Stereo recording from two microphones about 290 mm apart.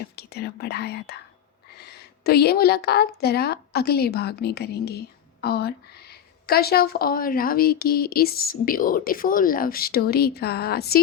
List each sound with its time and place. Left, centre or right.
0.2 s a woman's voice: left